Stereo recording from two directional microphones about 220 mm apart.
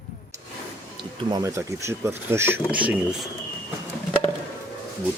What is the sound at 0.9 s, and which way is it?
Speech, 20° right (ahead or behind).